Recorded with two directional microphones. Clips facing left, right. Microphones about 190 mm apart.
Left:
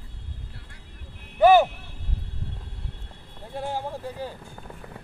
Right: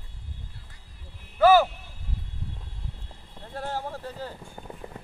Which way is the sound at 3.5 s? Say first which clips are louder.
Left 2 dB; 15° left (ahead or behind).